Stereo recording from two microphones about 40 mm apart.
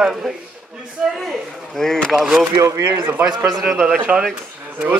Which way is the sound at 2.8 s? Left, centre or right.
Right.